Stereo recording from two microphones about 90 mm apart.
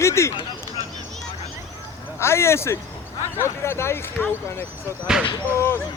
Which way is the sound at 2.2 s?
30° left (ahead or behind).